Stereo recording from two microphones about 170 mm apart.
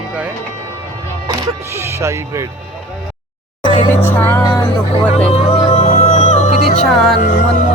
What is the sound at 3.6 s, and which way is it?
Music, 30° right (ahead or behind).